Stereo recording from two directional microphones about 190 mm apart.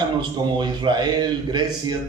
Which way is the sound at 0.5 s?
25° right (ahead or behind).